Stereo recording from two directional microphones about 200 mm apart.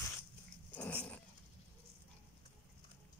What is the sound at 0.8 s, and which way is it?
Dog, 10° left (ahead or behind).